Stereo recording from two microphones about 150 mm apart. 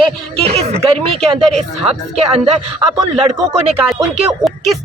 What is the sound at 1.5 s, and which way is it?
Speech, 40° right (ahead or behind).